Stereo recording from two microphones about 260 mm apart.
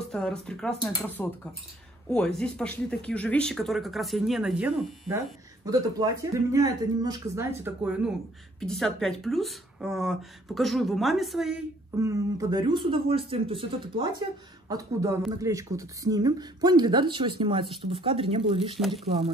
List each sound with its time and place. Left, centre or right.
0.1 s speech: centre
5.7 s speech: centre